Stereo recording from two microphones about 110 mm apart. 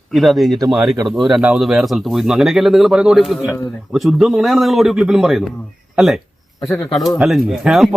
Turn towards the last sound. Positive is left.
turn(degrees=0)  # may be behind; listen again after turning